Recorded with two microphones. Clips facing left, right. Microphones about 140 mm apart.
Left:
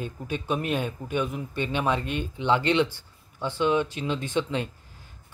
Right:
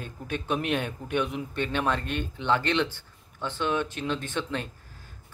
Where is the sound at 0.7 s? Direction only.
5° left (ahead or behind).